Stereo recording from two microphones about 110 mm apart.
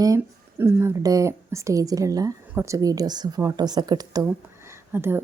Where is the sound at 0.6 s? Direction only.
20° right (ahead or behind); by 4.2 s 35° right (ahead or behind).